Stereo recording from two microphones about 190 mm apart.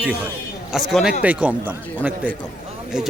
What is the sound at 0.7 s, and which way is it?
A man's voice, centre (ahead or behind).